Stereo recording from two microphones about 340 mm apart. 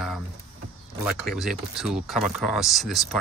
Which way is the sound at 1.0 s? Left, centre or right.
Centre.